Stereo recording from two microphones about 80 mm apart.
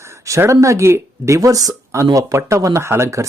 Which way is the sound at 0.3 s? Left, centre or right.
Right.